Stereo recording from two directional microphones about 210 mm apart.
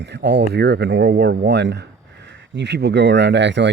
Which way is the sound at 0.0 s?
55° right (ahead or behind).